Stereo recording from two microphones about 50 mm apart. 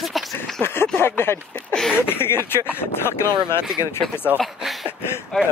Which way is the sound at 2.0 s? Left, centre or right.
Left.